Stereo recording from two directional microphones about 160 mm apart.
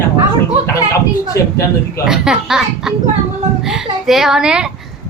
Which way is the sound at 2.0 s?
5° right (ahead or behind).